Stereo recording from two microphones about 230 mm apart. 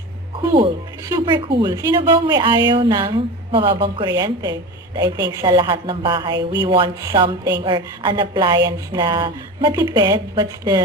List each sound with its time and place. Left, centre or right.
0.4 s a woman's voice: centre